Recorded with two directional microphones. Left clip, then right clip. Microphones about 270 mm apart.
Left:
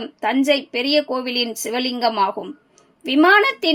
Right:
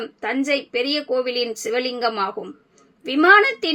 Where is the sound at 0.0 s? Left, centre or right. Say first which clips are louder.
Left 4 dB; left.